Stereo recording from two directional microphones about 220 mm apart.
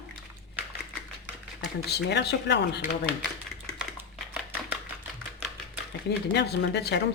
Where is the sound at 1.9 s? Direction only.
50° left (ahead or behind).